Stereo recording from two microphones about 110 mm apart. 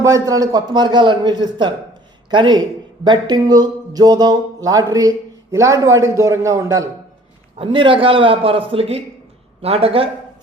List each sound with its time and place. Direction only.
0.0 s a man's voice: 30° right (ahead or behind)
7.6 s a man's voice: 50° right (ahead or behind)